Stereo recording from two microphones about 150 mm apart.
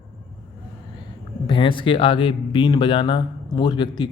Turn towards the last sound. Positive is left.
turn(degrees=30)  # may be behind; listen again after turning